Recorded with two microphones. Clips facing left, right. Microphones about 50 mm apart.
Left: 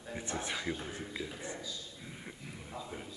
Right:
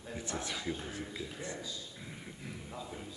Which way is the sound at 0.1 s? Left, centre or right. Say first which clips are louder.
Left 1 dB; left.